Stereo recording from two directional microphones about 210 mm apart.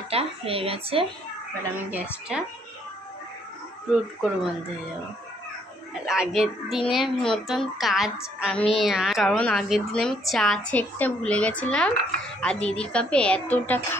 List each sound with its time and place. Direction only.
0.1 s speech: 25° right (ahead or behind)
2.3 s a woman's voice: centre (ahead or behind)
3.9 s a woman's voice: centre (ahead or behind)
5.9 s a woman's voice: 5° right (ahead or behind)